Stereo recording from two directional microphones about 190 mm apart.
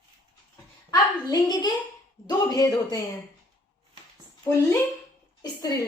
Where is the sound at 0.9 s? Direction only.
20° left (ahead or behind).